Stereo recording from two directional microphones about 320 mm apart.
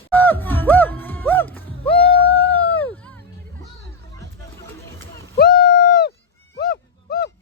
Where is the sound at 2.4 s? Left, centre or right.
Centre.